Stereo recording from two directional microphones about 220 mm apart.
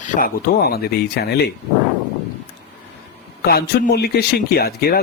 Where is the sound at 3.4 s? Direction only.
45° left (ahead or behind).